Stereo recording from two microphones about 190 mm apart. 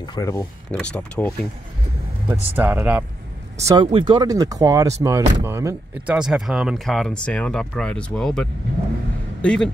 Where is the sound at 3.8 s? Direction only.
25° right (ahead or behind).